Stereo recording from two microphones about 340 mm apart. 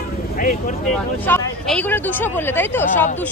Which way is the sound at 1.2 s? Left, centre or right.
Centre.